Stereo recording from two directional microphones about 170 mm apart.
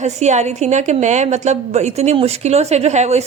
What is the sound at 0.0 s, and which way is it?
A woman's voice, 40° right (ahead or behind).